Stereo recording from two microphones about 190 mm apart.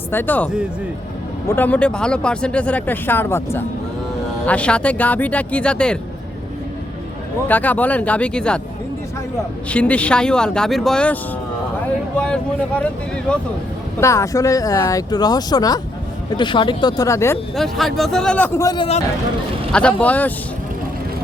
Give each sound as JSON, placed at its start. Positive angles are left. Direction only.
{"t": 0.1, "sound": "speech", "side_deg": 10}
{"t": 7.4, "sound": "speech", "side_deg": 10}
{"t": 9.6, "sound": "speech", "side_deg": 5}
{"t": 17.5, "sound": "speech", "side_deg": 0}
{"t": 19.7, "sound": "speech", "side_deg": 5}